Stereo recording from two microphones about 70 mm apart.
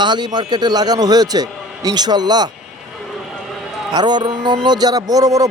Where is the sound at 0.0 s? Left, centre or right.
Right.